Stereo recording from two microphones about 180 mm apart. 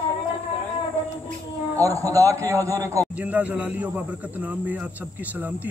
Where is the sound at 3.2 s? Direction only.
10° right (ahead or behind).